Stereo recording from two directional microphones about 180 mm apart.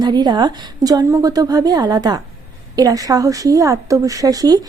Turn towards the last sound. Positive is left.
turn(degrees=-20)  # may be behind; listen again after turning